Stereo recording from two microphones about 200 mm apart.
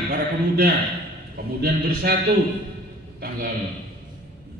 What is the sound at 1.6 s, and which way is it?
Speech, 50° right (ahead or behind).